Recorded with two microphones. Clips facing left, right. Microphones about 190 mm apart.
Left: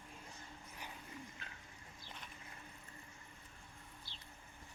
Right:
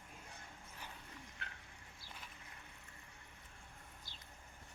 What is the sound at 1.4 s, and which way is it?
Bird, 65° right (ahead or behind).